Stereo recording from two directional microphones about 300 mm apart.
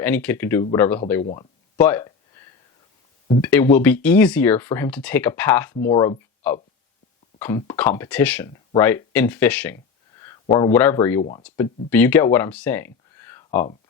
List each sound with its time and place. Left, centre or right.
0.0 s speech: centre
1.2 s speech: centre
1.8 s a sound: centre
3.4 s speech: centre